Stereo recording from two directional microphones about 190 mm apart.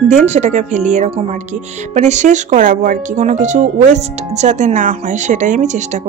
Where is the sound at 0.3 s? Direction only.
40° right (ahead or behind).